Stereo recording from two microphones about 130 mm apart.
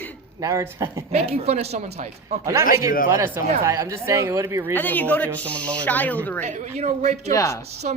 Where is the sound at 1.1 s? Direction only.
55° right (ahead or behind).